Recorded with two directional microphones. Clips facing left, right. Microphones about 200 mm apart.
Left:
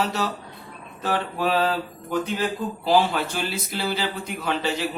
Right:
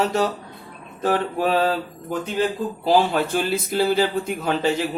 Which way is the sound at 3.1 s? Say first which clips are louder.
Right 6 dB; 50° right (ahead or behind).